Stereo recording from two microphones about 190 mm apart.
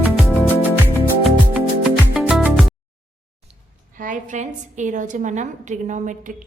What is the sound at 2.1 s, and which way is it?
Music, 5° right (ahead or behind).